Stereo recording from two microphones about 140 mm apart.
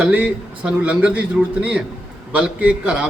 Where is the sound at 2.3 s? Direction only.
10° right (ahead or behind).